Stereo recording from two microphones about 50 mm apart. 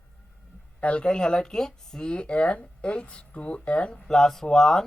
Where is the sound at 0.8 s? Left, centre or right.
Left.